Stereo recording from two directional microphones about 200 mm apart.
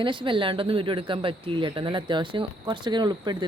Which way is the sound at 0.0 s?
25° right (ahead or behind).